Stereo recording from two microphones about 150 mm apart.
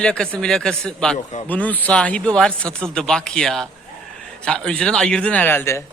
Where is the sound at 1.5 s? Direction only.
10° left (ahead or behind).